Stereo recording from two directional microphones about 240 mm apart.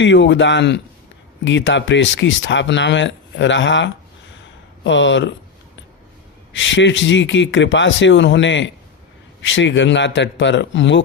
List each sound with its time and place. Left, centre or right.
0.0 s speech: left
6.5 s speech: left